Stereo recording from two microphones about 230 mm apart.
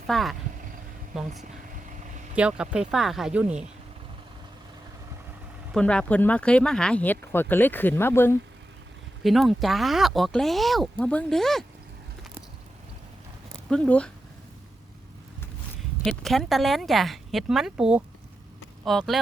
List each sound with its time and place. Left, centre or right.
0.1 s speech: centre
2.3 s speech: centre
5.7 s speech: centre
9.2 s speech: centre
13.7 s speech: centre
16.0 s speech: centre